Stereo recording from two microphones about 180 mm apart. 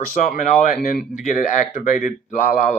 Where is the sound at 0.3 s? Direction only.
45° left (ahead or behind).